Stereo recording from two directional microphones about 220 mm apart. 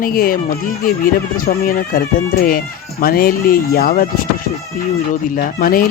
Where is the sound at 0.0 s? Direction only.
40° left (ahead or behind).